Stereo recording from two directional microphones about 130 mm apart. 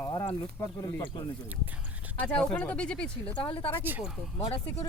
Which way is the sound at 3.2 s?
40° left (ahead or behind).